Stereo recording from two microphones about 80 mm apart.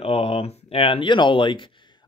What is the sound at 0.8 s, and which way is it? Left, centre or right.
Speech, left.